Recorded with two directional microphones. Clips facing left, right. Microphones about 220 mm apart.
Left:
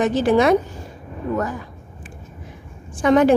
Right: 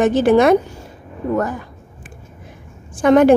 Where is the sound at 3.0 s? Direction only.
50° right (ahead or behind).